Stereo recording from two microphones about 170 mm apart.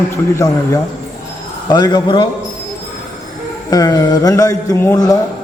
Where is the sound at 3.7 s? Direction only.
20° left (ahead or behind).